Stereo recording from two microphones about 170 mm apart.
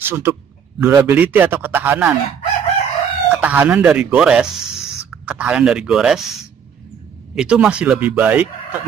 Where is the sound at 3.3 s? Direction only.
10° right (ahead or behind).